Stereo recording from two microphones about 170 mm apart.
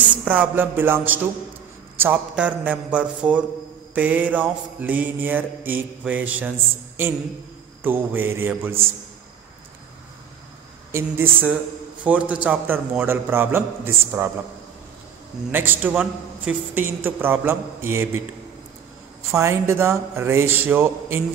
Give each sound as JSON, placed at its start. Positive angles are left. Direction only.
{"t": 0.1, "sound": "a man's voice", "side_deg": -10}
{"t": 7.8, "sound": "a man's voice", "side_deg": -10}
{"t": 10.9, "sound": "a man's voice", "side_deg": -15}
{"t": 15.5, "sound": "a man's voice", "side_deg": -10}
{"t": 19.3, "sound": "a man's voice", "side_deg": -15}